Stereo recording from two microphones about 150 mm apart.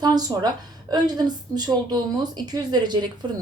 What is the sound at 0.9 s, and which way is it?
A woman's voice, 25° right (ahead or behind).